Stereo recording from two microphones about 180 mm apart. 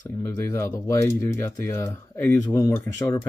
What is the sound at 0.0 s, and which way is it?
Speech, 15° left (ahead or behind).